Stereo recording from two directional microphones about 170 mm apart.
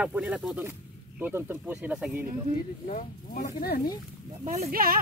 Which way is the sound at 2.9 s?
45° left (ahead or behind).